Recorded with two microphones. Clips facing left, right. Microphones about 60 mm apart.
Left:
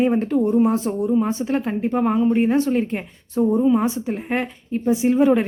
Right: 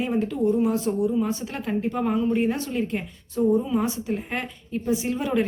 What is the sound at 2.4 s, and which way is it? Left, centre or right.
A woman's voice, left.